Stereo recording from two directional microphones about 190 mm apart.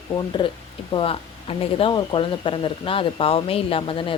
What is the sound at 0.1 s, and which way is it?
Speech, 25° left (ahead or behind).